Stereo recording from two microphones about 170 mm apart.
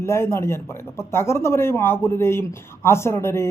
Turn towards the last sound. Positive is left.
turn(degrees=15)  # may be behind; listen again after turning